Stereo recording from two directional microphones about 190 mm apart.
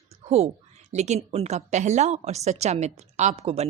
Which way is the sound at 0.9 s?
35° right (ahead or behind).